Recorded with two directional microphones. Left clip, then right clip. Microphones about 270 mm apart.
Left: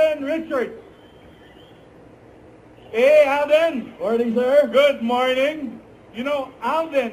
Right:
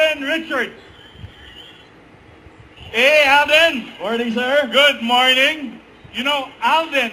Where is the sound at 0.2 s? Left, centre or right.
Centre.